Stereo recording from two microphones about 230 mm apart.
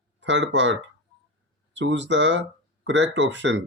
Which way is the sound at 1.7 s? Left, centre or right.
Right.